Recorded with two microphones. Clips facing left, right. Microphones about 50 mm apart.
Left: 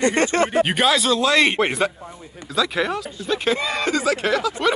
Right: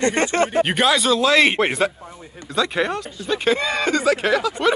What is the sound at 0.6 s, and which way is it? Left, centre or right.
Speech, centre.